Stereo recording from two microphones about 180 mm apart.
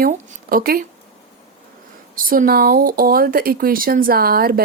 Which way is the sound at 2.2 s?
50° right (ahead or behind).